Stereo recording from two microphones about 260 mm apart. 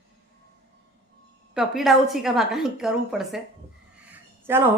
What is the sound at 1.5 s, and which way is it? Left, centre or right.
A woman's voice, centre.